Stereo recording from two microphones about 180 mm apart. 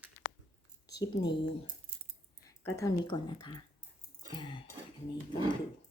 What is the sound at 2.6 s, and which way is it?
Speech, 20° left (ahead or behind).